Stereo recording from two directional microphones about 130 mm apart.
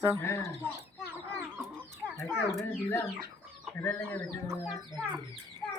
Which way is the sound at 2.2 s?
Centre (ahead or behind).